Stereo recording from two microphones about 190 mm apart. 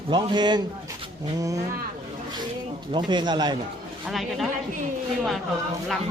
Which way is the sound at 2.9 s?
25° right (ahead or behind).